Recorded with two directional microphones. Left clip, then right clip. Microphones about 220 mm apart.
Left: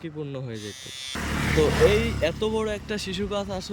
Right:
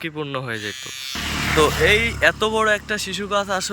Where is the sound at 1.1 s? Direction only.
15° left (ahead or behind).